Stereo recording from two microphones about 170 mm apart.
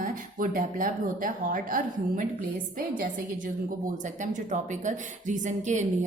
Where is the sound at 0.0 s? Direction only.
55° right (ahead or behind).